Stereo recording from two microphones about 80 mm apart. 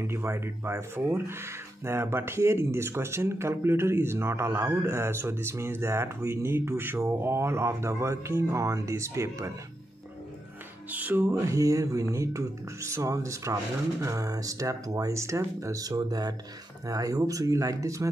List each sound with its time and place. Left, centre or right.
0.0 s speech: right
10.9 s speech: right
11.3 s speech: right
15.9 s speech: right